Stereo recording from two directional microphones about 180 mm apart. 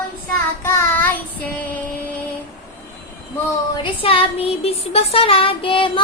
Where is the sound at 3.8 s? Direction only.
30° left (ahead or behind).